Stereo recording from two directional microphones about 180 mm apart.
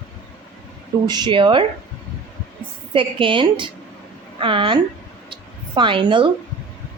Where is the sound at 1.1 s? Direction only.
25° right (ahead or behind).